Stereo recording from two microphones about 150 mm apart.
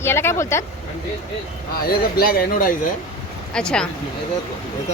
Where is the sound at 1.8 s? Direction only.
85° left.